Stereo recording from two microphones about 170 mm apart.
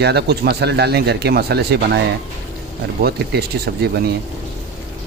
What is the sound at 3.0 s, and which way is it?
Speech, 70° right (ahead or behind).